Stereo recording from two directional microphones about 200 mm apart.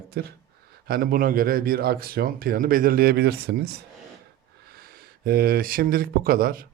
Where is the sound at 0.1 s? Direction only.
50° right (ahead or behind).